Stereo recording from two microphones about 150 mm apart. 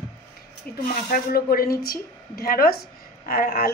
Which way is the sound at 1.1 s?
90° left.